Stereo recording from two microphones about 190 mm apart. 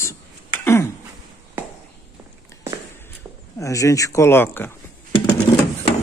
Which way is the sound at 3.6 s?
15° left (ahead or behind).